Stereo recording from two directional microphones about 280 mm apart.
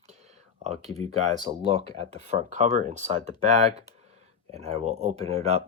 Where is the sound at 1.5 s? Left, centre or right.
Centre.